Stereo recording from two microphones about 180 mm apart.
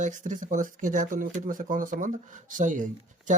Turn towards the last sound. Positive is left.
turn(degrees=-45)  # may be behind; listen again after turning